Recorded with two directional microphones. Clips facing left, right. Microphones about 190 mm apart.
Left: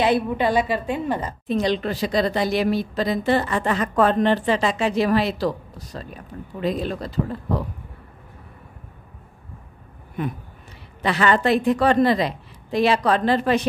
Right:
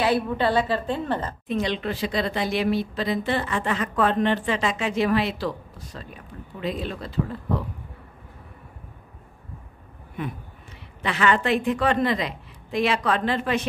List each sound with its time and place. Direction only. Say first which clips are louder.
0.0 s a woman's voice: left 2 dB; 15° left (ahead or behind)
1.5 s a woman's voice: left 4 dB; 40° left (ahead or behind)
11.0 s a woman's voice: left 3 dB; 40° left (ahead or behind)